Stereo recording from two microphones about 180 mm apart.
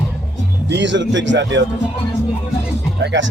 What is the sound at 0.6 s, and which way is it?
Speech, 80° right.